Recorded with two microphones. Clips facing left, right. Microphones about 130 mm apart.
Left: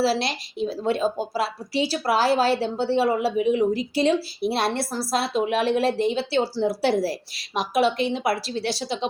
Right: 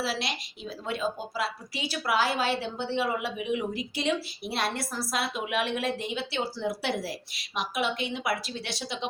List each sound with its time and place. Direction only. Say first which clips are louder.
0.0 s a woman's voice: left 9 dB; 35° left (ahead or behind)